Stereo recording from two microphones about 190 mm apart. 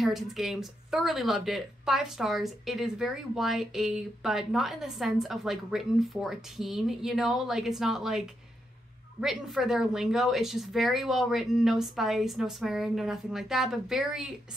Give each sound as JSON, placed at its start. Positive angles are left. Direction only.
{"t": 0.0, "sound": "speech", "side_deg": 0}
{"t": 9.2, "sound": "speech", "side_deg": 0}